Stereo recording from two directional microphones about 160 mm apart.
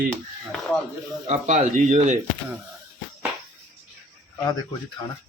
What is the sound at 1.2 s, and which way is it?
Speech, 45° right (ahead or behind).